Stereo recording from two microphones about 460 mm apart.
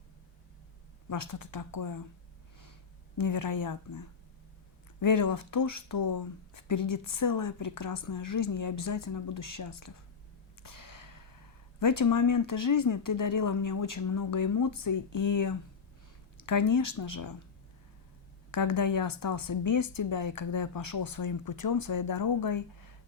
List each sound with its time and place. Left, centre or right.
1.1 s speech: left
3.2 s speech: left
10.6 s gasp: left
11.8 s speech: left
18.5 s speech: left